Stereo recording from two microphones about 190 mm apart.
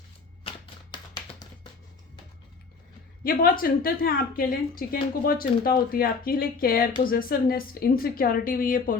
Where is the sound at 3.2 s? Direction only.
50° left (ahead or behind).